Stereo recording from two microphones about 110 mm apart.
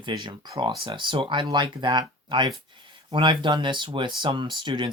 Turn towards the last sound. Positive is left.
turn(degrees=-45)  # may be behind; listen again after turning